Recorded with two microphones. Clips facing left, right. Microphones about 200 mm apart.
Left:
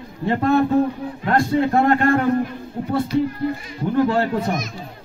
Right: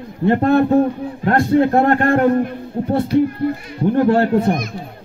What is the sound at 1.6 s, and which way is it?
Speech, 55° right (ahead or behind).